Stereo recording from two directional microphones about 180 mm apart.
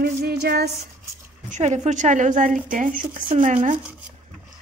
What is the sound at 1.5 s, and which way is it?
Speech, 40° right (ahead or behind).